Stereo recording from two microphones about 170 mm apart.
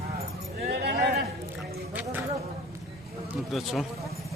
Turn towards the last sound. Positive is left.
turn(degrees=0)  # may be behind; listen again after turning